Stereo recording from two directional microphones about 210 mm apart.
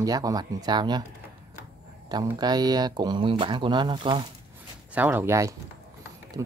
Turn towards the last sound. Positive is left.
turn(degrees=-15)  # may be behind; listen again after turning